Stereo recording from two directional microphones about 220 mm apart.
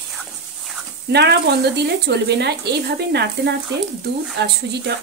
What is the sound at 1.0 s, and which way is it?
Speech, 50° right (ahead or behind).